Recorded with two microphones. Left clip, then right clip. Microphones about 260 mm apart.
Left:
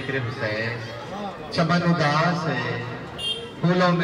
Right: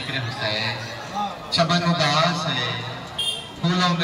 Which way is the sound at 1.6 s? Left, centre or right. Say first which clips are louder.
Right 2 dB; centre.